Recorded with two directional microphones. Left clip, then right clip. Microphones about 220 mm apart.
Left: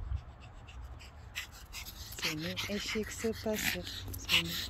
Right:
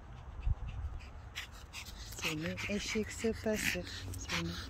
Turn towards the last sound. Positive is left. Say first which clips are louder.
# left 8 dB
turn(degrees=10)  # may be behind; listen again after turning